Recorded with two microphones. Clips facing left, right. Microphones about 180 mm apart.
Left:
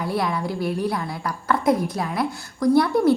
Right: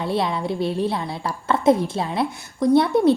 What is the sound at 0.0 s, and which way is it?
A woman's voice, 25° right (ahead or behind).